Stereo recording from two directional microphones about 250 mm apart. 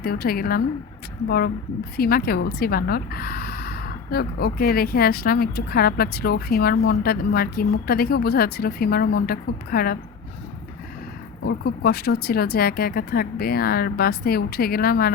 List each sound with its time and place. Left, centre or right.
0.0 s speech: left
2.0 s speech: left
11.4 s speech: left